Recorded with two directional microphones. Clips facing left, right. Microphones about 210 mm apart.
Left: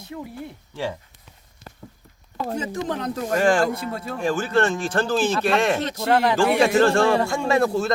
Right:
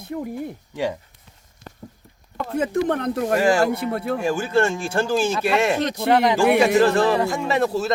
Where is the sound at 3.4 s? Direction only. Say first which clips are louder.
Even; 10° right (ahead or behind).